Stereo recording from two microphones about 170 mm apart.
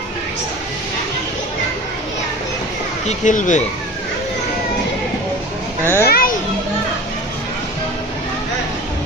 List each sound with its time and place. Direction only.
3.1 s speech: 45° left (ahead or behind)
5.8 s a child's voice: 10° left (ahead or behind)
6.1 s children playing: 60° left (ahead or behind)